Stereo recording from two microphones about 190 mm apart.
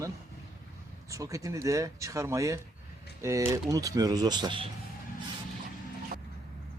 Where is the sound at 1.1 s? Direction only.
15° right (ahead or behind).